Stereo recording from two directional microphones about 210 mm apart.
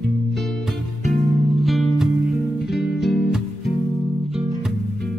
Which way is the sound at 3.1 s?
Centre (ahead or behind).